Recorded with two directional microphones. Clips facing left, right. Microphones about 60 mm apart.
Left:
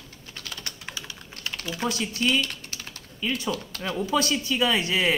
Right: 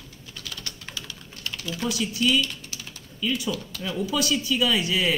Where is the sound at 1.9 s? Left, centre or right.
Left.